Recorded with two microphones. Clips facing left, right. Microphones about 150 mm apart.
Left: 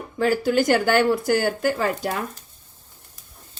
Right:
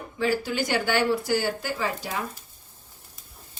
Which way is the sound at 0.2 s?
50° left (ahead or behind).